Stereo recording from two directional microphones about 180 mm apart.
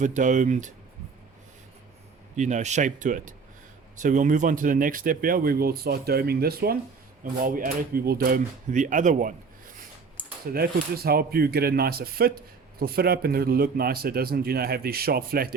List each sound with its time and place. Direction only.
0.0 s speech: 45° right (ahead or behind)
2.3 s speech: 40° right (ahead or behind)
10.5 s a man's voice: 60° right (ahead or behind)